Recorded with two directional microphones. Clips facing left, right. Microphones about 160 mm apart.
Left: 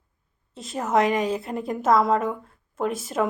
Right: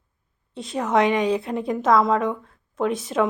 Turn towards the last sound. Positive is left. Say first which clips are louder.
# right 3 dB
turn(degrees=5)  # may be behind; listen again after turning